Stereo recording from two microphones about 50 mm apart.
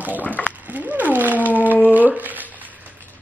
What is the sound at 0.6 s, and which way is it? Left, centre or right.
Cat, right.